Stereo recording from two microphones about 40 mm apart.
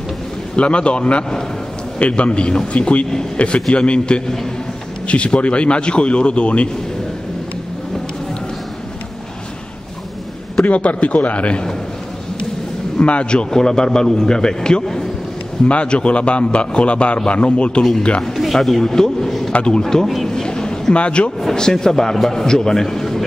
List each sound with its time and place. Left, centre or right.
0.6 s a man's voice: left
10.6 s a man's voice: left
12.9 s a man's voice: left
15.6 s a man's voice: left
18.2 s a man's voice: centre
19.5 s a man's voice: left
20.2 s a sound: centre
21.0 s a man's voice: left
21.5 s a man's voice: centre